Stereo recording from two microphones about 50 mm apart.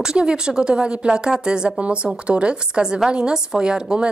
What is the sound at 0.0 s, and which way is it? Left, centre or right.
A woman's voice, centre.